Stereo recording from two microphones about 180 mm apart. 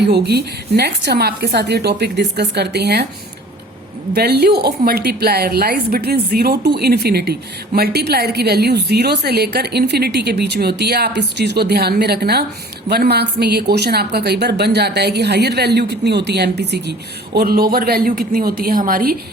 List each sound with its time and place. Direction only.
0.0 s a woman's voice: 65° right (ahead or behind)
4.1 s a woman's voice: 60° right (ahead or behind)
17.3 s a woman's voice: 55° right (ahead or behind)